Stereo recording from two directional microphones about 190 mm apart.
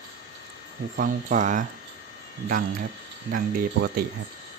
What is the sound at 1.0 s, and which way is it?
Speech, 45° right (ahead or behind).